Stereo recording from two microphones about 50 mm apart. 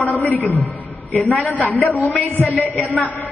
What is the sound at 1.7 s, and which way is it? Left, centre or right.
A woman's voice, left.